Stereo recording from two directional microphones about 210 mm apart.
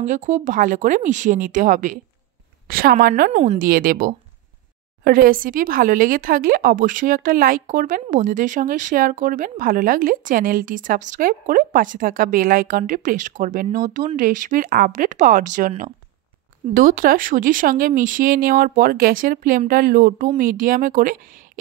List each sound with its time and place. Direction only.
0.0 s a woman's voice: 35° right (ahead or behind)